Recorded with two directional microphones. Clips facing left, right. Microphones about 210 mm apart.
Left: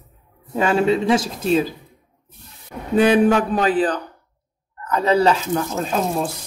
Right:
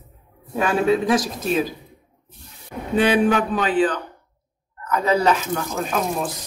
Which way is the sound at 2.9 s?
40° left (ahead or behind).